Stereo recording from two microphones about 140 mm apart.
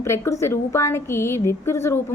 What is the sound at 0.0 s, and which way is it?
A woman's voice, 20° left (ahead or behind).